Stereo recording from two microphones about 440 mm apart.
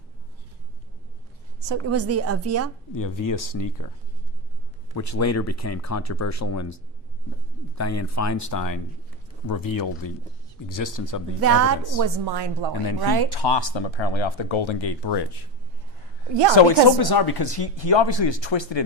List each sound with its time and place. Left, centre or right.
1.6 s a woman's voice: right
2.9 s speech: left
4.9 s speech: left
11.3 s a woman's voice: right
11.9 s a woman's voice: right
12.7 s speech: left
16.6 s speech: left